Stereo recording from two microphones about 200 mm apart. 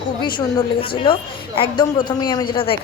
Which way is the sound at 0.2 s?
25° left (ahead or behind).